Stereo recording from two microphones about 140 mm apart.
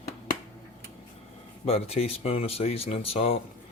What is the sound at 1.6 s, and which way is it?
Speech, 45° left (ahead or behind).